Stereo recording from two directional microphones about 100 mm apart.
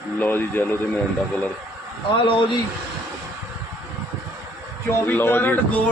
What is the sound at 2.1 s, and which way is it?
Speech, 60° left (ahead or behind).